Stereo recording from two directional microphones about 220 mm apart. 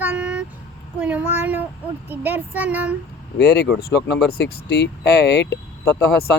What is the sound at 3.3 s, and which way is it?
Speech, 50° left (ahead or behind).